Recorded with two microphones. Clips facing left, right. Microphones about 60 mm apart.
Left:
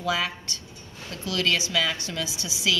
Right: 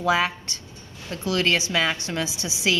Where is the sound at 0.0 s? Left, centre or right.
Right.